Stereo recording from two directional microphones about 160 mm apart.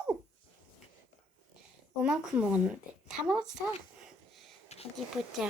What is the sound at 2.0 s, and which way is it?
A woman's voice, 5° right (ahead or behind).